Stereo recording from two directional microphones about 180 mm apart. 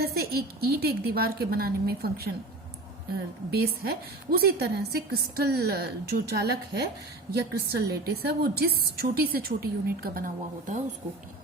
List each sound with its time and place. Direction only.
0.0 s a woman's voice: 60° right (ahead or behind)
3.5 s a woman's voice: 60° right (ahead or behind)